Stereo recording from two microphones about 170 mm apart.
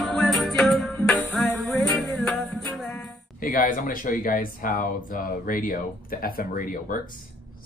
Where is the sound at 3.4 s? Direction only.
55° left (ahead or behind).